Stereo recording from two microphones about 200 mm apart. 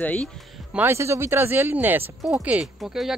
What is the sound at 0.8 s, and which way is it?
Speech, 15° right (ahead or behind).